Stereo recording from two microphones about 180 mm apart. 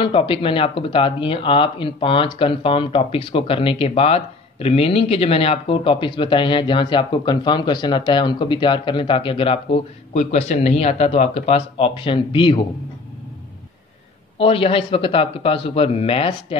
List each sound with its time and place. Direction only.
0.0 s speech: 30° left (ahead or behind)
14.4 s speech: 30° left (ahead or behind)